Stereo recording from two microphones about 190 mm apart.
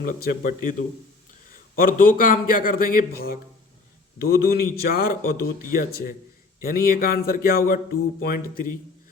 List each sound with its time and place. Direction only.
0.0 s a man's voice: 50° left (ahead or behind)